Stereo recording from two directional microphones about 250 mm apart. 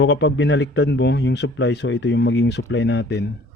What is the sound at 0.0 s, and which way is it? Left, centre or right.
Speech, left.